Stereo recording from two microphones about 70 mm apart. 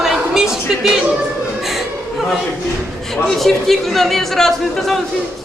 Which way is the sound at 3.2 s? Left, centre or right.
Centre.